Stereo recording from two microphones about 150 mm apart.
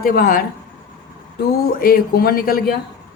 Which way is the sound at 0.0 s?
80° left.